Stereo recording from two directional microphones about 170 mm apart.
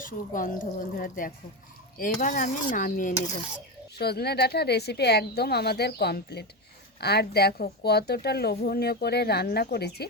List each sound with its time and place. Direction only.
0.0 s a woman's voice: 50° left (ahead or behind)
3.9 s a woman's voice: 70° left (ahead or behind)